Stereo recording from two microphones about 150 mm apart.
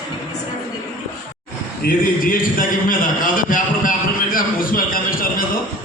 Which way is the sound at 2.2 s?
65° left (ahead or behind).